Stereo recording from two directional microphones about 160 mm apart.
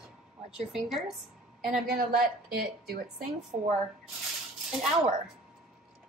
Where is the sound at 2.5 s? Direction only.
75° right (ahead or behind).